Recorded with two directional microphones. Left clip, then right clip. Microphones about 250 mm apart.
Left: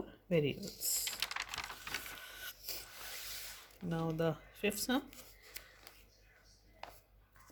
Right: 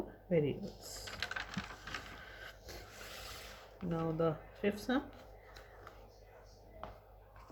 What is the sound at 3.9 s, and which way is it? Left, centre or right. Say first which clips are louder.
Speech: right 1 dB; left.